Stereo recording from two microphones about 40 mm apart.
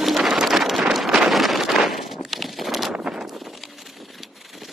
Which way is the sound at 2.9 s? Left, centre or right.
Right.